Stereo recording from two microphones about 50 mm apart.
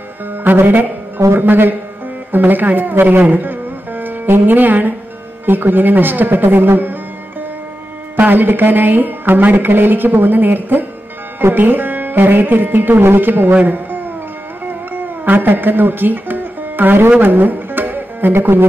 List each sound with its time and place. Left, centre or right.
0.4 s music: right
1.3 s speech: right
8.2 s speech: right
14.7 s music: right
18.3 s speech: right